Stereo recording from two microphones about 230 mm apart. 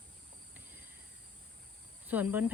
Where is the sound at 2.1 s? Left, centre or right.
Centre.